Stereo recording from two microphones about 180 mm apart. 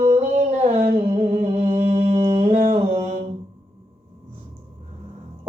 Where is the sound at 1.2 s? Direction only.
35° right (ahead or behind).